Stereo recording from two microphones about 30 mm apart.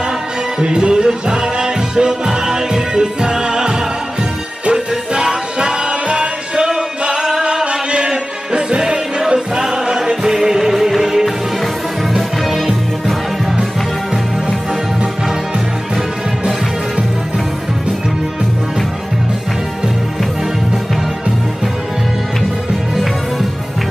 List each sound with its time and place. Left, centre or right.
0.6 s music: right
7.6 s music: right
9.9 s music: centre